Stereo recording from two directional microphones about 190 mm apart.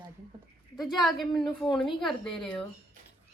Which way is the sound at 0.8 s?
Centre (ahead or behind).